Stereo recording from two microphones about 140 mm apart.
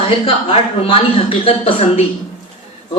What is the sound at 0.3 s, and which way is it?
A woman's voice, 40° left (ahead or behind).